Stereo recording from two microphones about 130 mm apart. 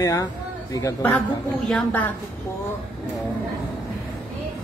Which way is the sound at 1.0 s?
10° left (ahead or behind).